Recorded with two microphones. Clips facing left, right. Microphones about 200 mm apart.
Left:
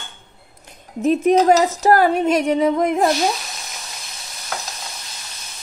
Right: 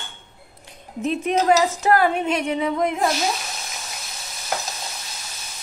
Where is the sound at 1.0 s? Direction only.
45° left (ahead or behind).